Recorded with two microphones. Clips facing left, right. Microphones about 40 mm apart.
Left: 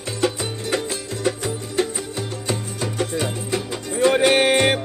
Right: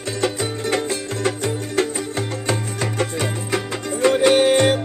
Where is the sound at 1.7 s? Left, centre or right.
Right.